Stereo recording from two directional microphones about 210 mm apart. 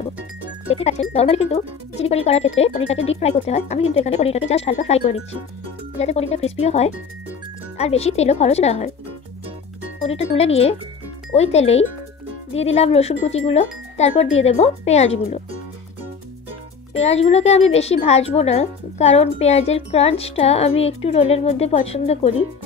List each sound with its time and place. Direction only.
0.7 s speech: 30° left (ahead or behind)
10.0 s speech: 30° left (ahead or behind)
16.9 s speech: 30° left (ahead or behind)